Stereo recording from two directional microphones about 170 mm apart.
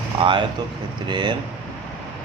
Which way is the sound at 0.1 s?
30° right (ahead or behind).